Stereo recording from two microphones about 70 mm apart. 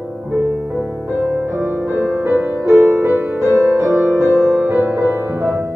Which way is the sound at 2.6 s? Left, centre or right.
Right.